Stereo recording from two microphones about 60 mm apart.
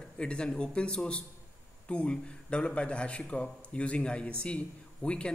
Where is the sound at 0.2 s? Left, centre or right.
Centre.